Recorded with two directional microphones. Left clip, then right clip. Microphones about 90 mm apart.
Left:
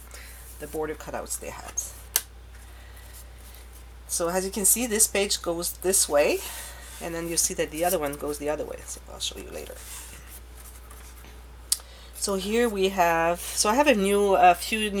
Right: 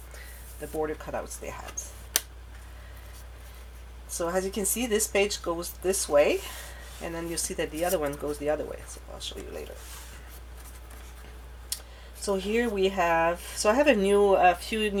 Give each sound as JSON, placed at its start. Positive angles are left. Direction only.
{"t": 0.6, "sound": "speech", "side_deg": 25}
{"t": 4.2, "sound": "speech", "side_deg": 20}
{"t": 8.2, "sound": "speech", "side_deg": 20}
{"t": 12.2, "sound": "speech", "side_deg": 25}